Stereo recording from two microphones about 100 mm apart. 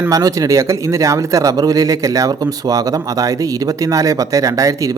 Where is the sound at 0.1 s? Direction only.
35° right (ahead or behind).